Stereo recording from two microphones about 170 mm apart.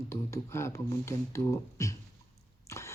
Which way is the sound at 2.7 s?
15° left (ahead or behind).